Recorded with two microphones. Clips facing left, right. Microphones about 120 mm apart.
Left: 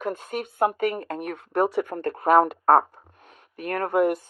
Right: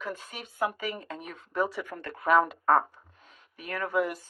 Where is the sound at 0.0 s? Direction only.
55° left (ahead or behind).